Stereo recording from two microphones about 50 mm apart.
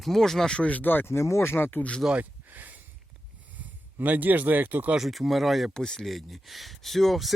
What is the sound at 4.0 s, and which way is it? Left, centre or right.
Speech, right.